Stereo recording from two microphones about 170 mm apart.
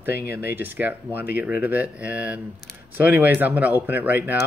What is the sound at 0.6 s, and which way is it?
Speech, 10° right (ahead or behind).